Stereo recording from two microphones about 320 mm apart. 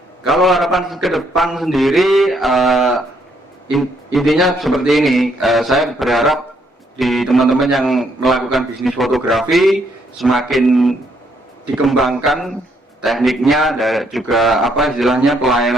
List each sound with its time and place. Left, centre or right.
0.2 s a man's voice: centre